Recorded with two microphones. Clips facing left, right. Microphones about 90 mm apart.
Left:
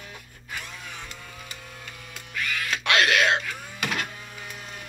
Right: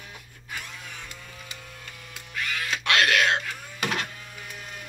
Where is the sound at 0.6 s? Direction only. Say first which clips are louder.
Left 2 dB; centre (ahead or behind).